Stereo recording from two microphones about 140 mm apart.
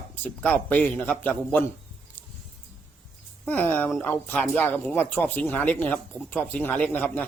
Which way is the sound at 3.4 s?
15° left (ahead or behind).